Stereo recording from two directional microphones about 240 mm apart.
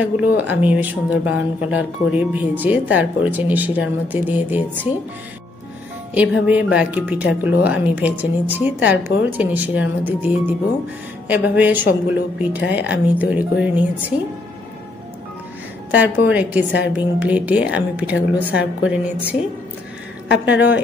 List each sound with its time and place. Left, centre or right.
0.0 s speech: centre
6.1 s a woman's voice: centre
16.3 s a woman's voice: centre
20.4 s a woman's voice: left